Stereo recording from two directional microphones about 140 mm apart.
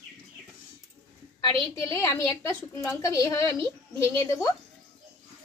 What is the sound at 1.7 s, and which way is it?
A woman's voice, 25° left (ahead or behind).